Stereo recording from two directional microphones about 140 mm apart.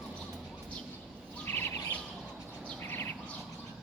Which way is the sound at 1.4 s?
15° left (ahead or behind).